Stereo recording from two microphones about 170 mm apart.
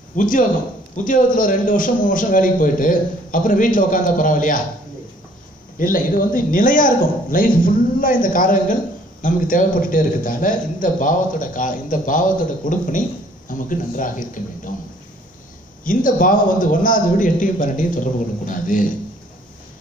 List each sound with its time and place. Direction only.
0.1 s a man's voice: 50° left (ahead or behind)
5.8 s a man's voice: 55° left (ahead or behind)
15.8 s a man's voice: 55° left (ahead or behind)